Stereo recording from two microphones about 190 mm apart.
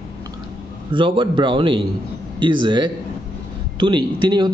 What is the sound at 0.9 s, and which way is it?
Speech, 25° right (ahead or behind).